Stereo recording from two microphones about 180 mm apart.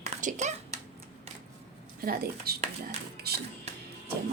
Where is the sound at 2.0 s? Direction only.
60° right (ahead or behind).